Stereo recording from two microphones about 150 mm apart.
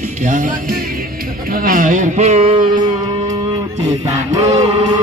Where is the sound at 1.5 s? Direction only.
70° right (ahead or behind); by 2.9 s 35° right (ahead or behind).